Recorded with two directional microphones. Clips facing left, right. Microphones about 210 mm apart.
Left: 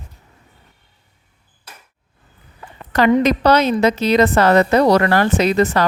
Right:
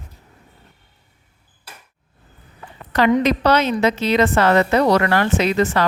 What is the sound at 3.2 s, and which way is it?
A woman's voice, 40° left (ahead or behind).